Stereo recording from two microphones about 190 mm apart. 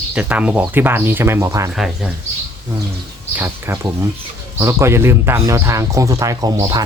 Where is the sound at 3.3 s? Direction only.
10° right (ahead or behind).